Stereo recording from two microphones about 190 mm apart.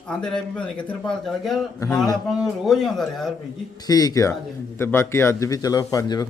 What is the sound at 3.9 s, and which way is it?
Speech, 20° left (ahead or behind).